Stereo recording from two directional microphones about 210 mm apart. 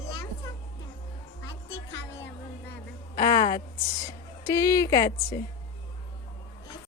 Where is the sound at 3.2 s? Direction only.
20° left (ahead or behind).